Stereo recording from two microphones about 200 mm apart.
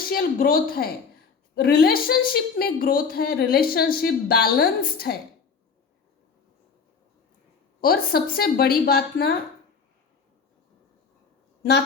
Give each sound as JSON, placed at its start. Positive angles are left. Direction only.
{"t": 0.1, "sound": "speech", "side_deg": 45}
{"t": 7.8, "sound": "speech", "side_deg": 50}